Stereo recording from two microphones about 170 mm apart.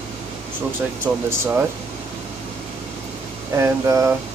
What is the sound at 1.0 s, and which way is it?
Speech, 15° right (ahead or behind).